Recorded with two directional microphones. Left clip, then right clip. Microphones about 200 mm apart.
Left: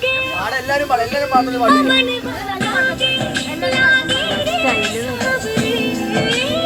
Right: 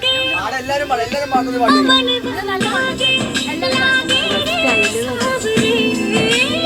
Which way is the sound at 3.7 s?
25° right (ahead or behind).